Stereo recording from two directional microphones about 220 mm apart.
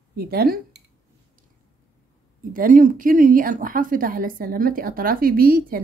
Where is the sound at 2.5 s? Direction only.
40° right (ahead or behind).